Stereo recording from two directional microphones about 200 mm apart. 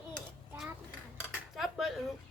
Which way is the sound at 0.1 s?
Centre (ahead or behind).